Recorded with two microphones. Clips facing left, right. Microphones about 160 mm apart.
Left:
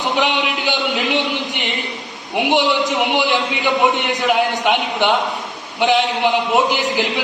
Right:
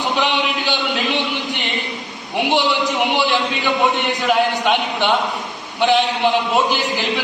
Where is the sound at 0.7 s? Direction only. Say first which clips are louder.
Left 4 dB; 15° left (ahead or behind).